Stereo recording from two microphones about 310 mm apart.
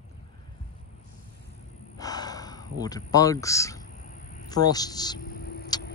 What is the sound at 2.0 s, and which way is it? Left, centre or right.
Speech, centre.